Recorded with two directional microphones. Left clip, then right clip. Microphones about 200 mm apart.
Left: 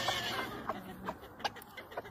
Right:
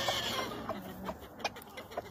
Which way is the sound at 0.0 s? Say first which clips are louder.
Right 1 dB; 65° right (ahead or behind).